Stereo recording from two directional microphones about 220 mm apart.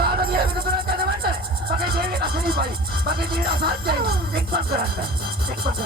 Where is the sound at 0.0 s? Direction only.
45° right (ahead or behind).